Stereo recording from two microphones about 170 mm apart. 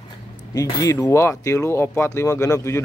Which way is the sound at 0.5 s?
20° left (ahead or behind).